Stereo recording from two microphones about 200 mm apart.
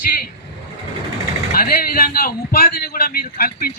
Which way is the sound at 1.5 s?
50° left (ahead or behind).